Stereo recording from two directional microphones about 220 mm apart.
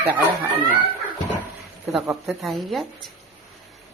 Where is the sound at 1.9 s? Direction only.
Centre (ahead or behind).